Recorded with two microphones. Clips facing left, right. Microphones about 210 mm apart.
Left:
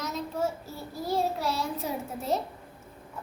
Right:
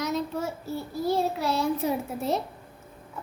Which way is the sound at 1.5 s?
60° right (ahead or behind).